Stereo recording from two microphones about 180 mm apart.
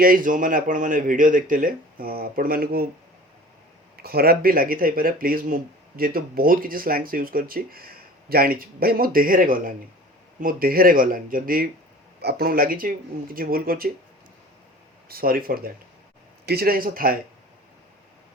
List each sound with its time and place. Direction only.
0.0 s speech: 50° right (ahead or behind)
3.9 s speech: 55° right (ahead or behind)
15.1 s speech: 55° right (ahead or behind)